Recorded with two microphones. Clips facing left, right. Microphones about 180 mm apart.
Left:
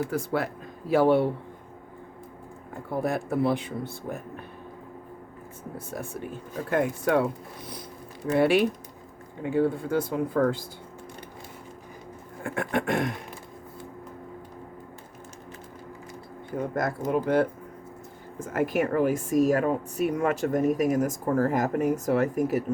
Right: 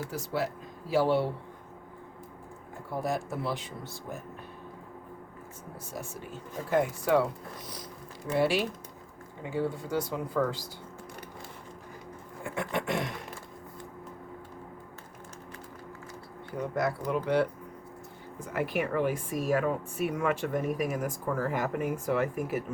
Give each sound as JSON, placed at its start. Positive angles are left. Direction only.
{"t": 0.1, "sound": "speech", "side_deg": 55}
{"t": 2.9, "sound": "speech", "side_deg": 60}
{"t": 5.7, "sound": "speech", "side_deg": 55}
{"t": 8.3, "sound": "speech", "side_deg": 55}
{"t": 12.4, "sound": "speech", "side_deg": 55}
{"t": 16.6, "sound": "a woman's voice", "side_deg": 50}